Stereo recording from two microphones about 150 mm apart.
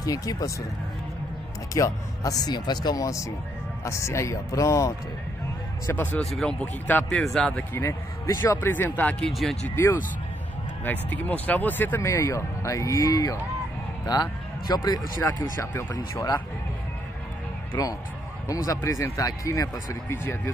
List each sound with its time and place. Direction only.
0.0 s speech: 25° left (ahead or behind)
1.7 s speech: 25° left (ahead or behind)
9.3 s speech: centre (ahead or behind)
10.8 s speech: 10° left (ahead or behind)
17.7 s speech: 25° left (ahead or behind)